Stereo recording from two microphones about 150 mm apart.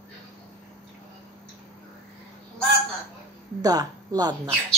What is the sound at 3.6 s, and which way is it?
Speech, 25° right (ahead or behind).